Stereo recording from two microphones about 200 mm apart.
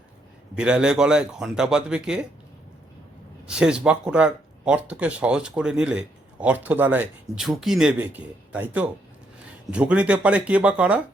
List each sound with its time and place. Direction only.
0.5 s speech: 5° right (ahead or behind)
3.4 s speech: 5° right (ahead or behind)
9.7 s speech: 5° right (ahead or behind)